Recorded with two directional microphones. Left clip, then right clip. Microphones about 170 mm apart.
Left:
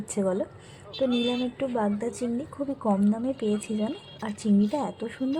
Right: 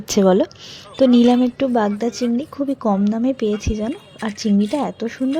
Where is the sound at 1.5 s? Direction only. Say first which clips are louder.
Right 9 dB; 40° right (ahead or behind).